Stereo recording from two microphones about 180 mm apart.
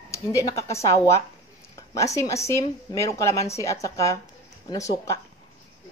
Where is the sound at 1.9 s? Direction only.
20° left (ahead or behind).